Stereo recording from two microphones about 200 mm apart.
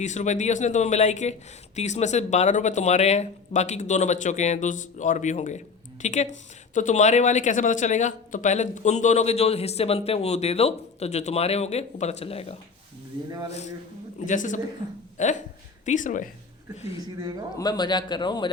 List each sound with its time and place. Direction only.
0.0 s speech: 35° left (ahead or behind)
14.3 s speech: 40° left (ahead or behind)
17.5 s a man's voice: 20° left (ahead or behind)